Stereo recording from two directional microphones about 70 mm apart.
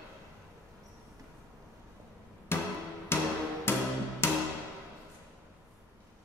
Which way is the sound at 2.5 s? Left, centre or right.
Left.